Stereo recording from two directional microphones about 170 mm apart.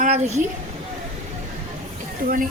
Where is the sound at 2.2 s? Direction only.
55° right (ahead or behind).